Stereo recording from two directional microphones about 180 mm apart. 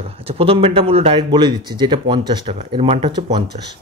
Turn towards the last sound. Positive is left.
turn(degrees=-25)  # may be behind; listen again after turning